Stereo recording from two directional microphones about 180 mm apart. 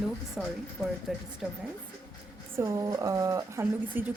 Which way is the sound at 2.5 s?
15° right (ahead or behind).